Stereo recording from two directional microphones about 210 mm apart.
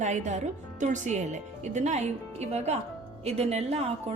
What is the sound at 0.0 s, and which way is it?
A woman's voice, 35° right (ahead or behind).